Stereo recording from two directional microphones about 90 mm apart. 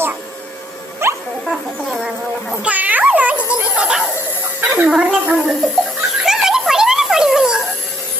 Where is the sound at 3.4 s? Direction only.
30° left (ahead or behind).